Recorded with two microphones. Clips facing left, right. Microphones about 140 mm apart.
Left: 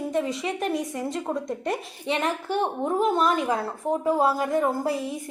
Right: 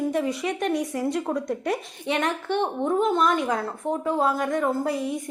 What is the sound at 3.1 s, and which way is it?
Speech, 35° left (ahead or behind).